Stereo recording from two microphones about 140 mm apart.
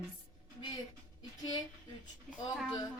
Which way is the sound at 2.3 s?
Centre (ahead or behind).